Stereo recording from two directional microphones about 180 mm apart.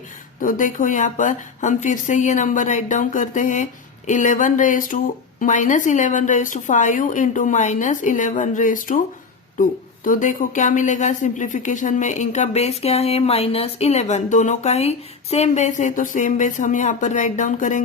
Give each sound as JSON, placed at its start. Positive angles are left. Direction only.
{"t": 0.4, "sound": "a woman's voice", "side_deg": 45}